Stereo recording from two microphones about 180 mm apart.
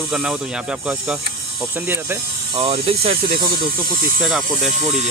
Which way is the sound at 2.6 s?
35° right (ahead or behind).